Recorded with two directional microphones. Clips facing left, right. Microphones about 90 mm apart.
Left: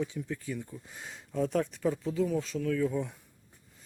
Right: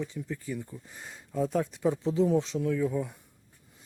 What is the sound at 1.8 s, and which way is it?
Speech, 25° right (ahead or behind).